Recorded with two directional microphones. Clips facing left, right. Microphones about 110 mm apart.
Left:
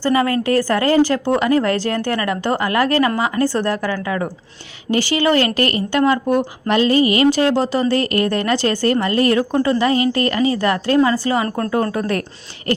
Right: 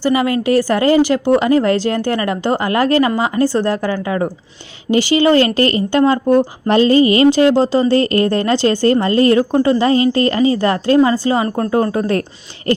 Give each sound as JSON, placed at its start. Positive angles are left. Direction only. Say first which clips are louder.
{"t": 0.0, "sound": "speech", "louder": "right 2 dB", "side_deg": -20}
{"t": 6.7, "sound": "a sound", "louder": "right 3 dB", "side_deg": -30}
{"t": 7.5, "sound": "speech", "louder": "right 4 dB", "side_deg": -25}